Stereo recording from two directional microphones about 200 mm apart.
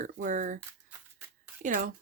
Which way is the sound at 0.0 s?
40° right (ahead or behind).